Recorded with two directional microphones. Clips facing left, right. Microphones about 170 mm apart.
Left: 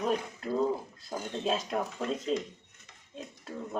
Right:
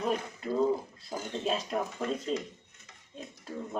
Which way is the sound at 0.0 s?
Centre (ahead or behind).